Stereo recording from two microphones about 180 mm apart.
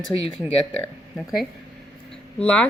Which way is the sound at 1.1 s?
Centre (ahead or behind).